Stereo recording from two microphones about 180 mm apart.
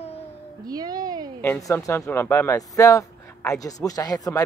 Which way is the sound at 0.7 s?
20° right (ahead or behind).